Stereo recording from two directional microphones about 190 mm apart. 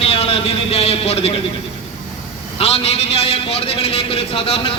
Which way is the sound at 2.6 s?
30° left (ahead or behind).